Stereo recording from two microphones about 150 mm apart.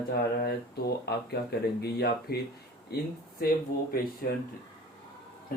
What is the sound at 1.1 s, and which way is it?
Speech, 90° left.